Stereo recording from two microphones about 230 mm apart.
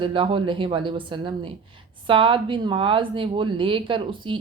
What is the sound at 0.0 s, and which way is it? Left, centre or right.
A woman's voice, right.